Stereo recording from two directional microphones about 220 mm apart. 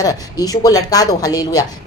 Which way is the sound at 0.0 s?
15° left (ahead or behind).